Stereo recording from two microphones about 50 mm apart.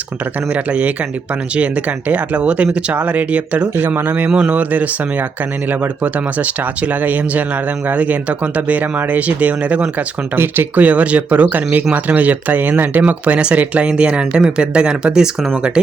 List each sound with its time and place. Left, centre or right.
0.5 s speech: right
3.8 s speech: right
4.3 s speech: centre
4.5 s speech: right
10.3 s speech: right
10.8 s speech: right
13.0 s speech: right